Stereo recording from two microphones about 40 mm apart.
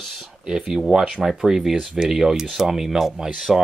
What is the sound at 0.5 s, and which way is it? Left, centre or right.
Speech, centre.